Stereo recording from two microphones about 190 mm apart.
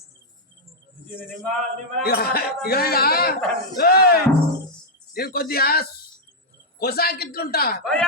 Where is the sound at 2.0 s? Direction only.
55° left (ahead or behind).